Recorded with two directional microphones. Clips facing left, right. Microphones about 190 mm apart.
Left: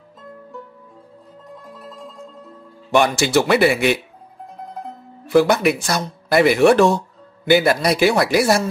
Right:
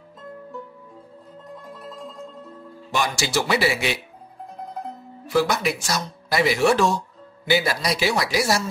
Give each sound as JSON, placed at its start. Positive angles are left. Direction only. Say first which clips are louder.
{"t": 1.5, "sound": "music", "louder": "even", "side_deg": 0}
{"t": 2.9, "sound": "speech", "louder": "left 8 dB", "side_deg": 60}
{"t": 5.2, "sound": "speech", "louder": "left 7 dB", "side_deg": 55}